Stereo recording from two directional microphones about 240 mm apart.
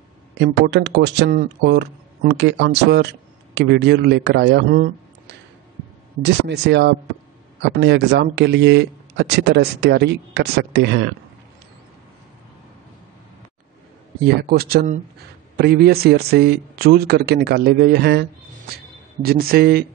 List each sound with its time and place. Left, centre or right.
0.4 s speech: right
14.2 s speech: right
19.2 s speech: right